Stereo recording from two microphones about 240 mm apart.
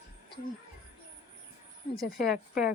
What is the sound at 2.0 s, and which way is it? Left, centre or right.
Speech, left.